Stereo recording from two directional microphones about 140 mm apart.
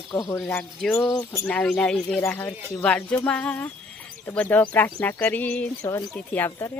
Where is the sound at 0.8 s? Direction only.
5° left (ahead or behind).